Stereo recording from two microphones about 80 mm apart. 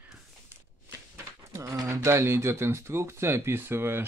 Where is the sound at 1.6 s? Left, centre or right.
Right.